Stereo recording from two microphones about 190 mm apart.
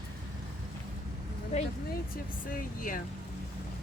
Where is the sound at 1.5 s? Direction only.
35° left (ahead or behind).